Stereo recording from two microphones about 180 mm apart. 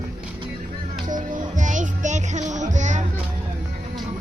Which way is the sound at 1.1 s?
45° right (ahead or behind).